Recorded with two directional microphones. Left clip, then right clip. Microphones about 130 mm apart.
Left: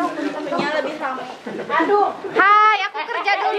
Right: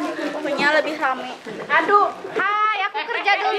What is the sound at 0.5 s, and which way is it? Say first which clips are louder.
Speech: right 4 dB; 15° right (ahead or behind).